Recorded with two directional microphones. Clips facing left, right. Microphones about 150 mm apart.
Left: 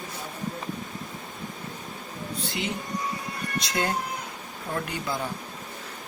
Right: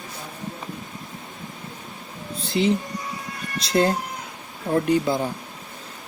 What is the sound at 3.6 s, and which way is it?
Speech, 30° right (ahead or behind).